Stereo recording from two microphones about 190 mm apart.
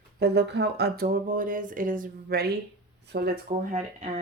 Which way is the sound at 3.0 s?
60° right (ahead or behind).